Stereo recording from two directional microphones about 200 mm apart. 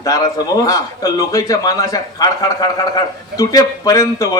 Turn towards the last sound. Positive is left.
turn(degrees=15)  # may be behind; listen again after turning